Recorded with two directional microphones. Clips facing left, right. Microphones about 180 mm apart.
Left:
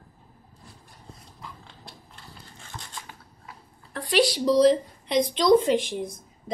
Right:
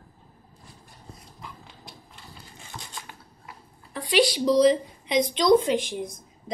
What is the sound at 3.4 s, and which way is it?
A woman's voice, centre (ahead or behind).